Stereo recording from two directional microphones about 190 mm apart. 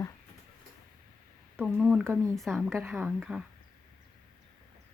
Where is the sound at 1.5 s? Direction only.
Centre (ahead or behind).